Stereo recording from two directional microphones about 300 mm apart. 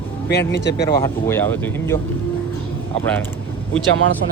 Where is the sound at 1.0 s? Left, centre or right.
Centre.